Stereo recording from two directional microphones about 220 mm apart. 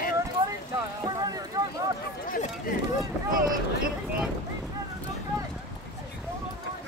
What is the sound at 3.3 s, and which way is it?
Speech, 40° right (ahead or behind).